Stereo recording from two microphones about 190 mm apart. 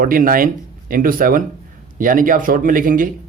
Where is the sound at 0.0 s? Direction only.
45° right (ahead or behind).